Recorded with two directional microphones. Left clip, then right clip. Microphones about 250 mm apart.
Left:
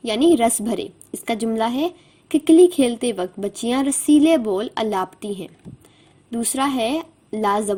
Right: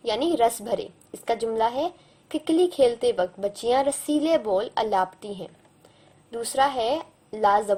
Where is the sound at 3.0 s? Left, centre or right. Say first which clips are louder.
Even; left.